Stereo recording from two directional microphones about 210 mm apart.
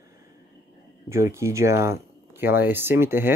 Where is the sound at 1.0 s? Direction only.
15° right (ahead or behind).